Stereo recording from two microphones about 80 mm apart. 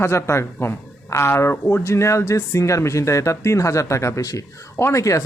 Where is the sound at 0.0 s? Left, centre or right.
Left.